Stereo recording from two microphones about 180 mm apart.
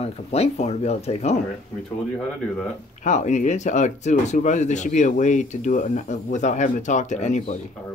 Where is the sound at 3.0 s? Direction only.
40° left (ahead or behind).